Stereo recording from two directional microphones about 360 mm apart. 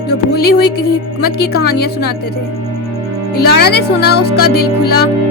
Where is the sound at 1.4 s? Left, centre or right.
Left.